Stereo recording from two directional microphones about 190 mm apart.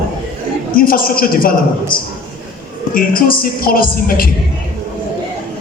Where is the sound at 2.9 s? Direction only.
50° left (ahead or behind).